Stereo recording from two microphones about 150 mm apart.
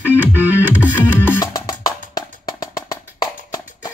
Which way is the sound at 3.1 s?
25° left (ahead or behind).